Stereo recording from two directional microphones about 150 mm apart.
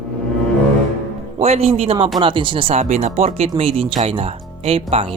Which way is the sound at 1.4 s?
40° right (ahead or behind).